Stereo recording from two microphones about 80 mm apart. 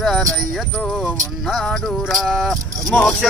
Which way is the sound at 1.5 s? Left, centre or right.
Centre.